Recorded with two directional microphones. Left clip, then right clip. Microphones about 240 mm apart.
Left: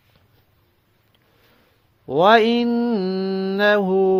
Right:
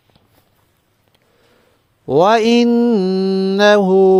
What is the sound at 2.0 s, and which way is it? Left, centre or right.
Mantra, right.